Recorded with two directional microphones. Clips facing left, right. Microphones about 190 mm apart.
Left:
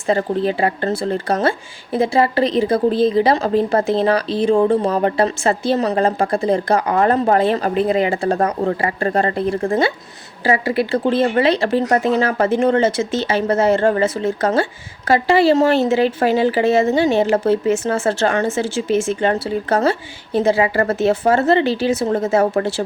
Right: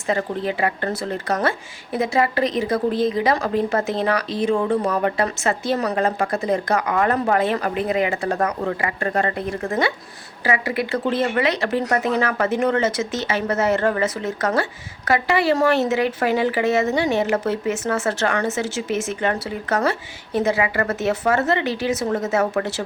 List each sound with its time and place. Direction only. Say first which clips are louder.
0.1 s speech: left 5 dB; 30° left (ahead or behind)